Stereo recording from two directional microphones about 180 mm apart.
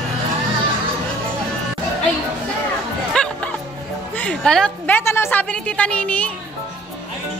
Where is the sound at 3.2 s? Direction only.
5° left (ahead or behind).